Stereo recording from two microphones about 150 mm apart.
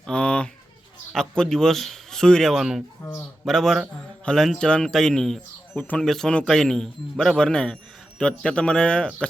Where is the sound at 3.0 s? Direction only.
15° left (ahead or behind).